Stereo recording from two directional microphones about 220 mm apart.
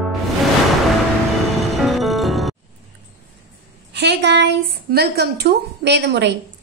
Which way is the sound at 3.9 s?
50° right (ahead or behind).